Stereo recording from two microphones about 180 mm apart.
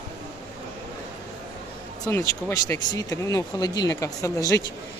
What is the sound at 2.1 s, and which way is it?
Speech, 15° left (ahead or behind).